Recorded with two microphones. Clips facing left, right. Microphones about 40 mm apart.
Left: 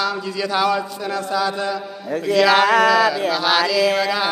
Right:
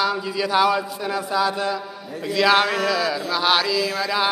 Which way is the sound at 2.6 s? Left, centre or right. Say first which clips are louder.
Left 8 dB; left.